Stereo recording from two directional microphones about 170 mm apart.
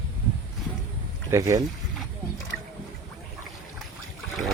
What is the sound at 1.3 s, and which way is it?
Speech, 15° right (ahead or behind).